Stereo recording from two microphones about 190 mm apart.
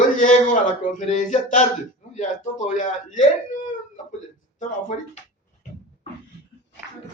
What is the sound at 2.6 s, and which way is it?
Speech, 40° left (ahead or behind).